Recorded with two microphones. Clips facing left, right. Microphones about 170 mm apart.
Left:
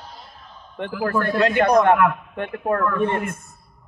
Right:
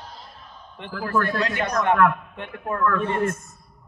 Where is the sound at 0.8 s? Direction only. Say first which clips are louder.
Left 2 dB; 55° left (ahead or behind).